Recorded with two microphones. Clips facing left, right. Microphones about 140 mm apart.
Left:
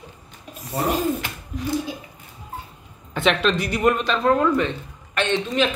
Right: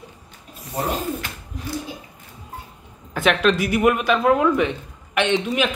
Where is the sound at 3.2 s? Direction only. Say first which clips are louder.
Right 2 dB; 5° right (ahead or behind).